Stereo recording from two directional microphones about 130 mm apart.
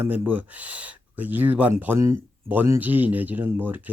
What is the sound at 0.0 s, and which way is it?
Speech, 15° right (ahead or behind).